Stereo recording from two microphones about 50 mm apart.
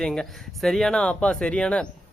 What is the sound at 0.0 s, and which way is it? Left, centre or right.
Speech, centre.